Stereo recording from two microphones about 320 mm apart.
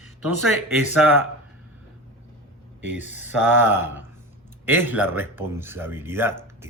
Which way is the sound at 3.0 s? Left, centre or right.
Centre.